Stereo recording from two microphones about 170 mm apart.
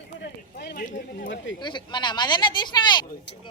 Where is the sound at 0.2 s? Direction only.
80° left; by 1.3 s 55° left (ahead or behind).